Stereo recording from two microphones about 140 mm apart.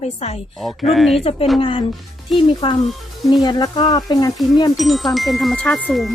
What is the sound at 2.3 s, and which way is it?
Speech, centre (ahead or behind).